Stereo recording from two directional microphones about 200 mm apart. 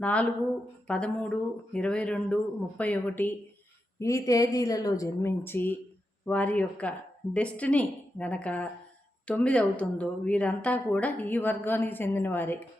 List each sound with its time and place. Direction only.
0.0 s speech: 5° left (ahead or behind)